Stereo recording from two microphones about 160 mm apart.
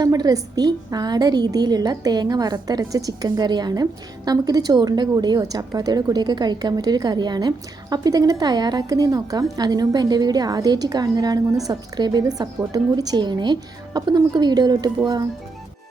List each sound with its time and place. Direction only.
0.0 s a woman's voice: 25° right (ahead or behind)